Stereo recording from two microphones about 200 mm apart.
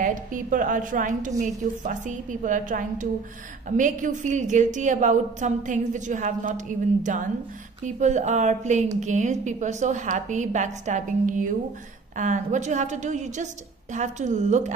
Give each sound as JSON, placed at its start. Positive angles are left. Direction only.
{"t": 0.0, "sound": "a woman's voice", "side_deg": -40}